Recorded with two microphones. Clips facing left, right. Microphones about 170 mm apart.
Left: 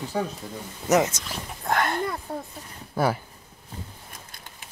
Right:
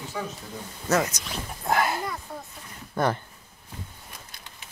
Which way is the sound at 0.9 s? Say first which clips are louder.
Left 4 dB; 20° left (ahead or behind).